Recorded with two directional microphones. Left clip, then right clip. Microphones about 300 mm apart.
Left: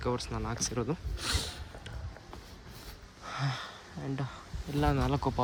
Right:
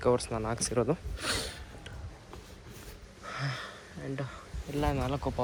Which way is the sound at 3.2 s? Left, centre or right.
Centre.